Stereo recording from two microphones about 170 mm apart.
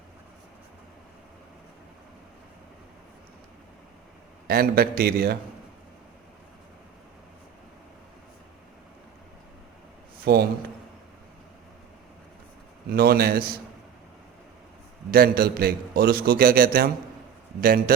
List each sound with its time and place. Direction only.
4.4 s a man's voice: 65° right (ahead or behind)
10.3 s a man's voice: 70° right (ahead or behind)
12.9 s a man's voice: 65° right (ahead or behind)
15.1 s a man's voice: 65° right (ahead or behind)